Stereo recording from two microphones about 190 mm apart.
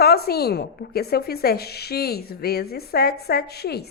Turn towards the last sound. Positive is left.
turn(degrees=55)  # may be behind; listen again after turning